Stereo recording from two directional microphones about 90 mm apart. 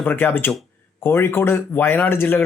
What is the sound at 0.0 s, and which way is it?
Speech, 20° left (ahead or behind).